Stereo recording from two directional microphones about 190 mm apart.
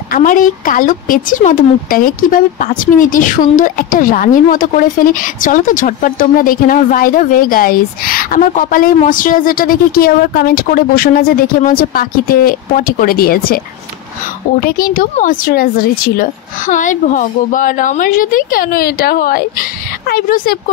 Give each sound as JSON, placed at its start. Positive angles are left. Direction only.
{"t": 0.1, "sound": "speech", "side_deg": 45}
{"t": 14.6, "sound": "a woman's voice", "side_deg": 50}